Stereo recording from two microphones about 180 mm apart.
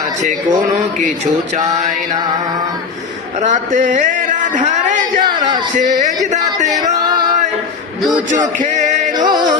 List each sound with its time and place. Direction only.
3.4 s speech: 45° right (ahead or behind)
5.2 s speech: 25° right (ahead or behind)
5.7 s speech: 45° right (ahead or behind)
8.3 s a sound: 45° right (ahead or behind)
9.1 s music: 25° right (ahead or behind)